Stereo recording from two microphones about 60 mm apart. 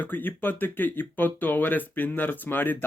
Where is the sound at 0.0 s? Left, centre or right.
Left.